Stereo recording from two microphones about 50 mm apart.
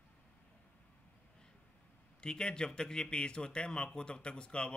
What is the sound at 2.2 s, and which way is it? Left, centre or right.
Speech, centre.